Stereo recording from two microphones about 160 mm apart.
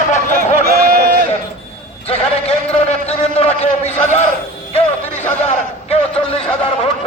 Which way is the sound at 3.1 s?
40° left (ahead or behind).